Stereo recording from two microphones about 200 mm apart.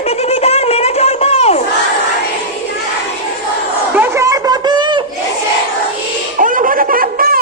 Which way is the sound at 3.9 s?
10° right (ahead or behind).